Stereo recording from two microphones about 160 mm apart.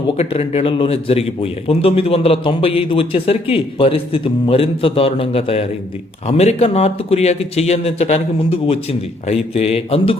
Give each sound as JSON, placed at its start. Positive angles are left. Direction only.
{"t": 0.1, "sound": "a man's voice", "side_deg": 40}